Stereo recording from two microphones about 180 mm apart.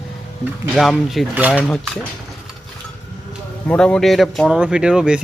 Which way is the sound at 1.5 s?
5° left (ahead or behind).